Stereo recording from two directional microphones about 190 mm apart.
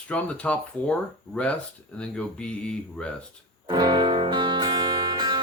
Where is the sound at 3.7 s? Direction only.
25° right (ahead or behind).